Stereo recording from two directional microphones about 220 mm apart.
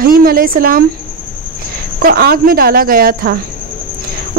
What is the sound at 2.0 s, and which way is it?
Speech, 45° right (ahead or behind).